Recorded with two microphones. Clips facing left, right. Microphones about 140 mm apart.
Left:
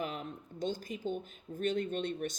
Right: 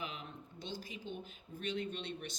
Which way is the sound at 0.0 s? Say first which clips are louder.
Left 7 dB; 45° left (ahead or behind).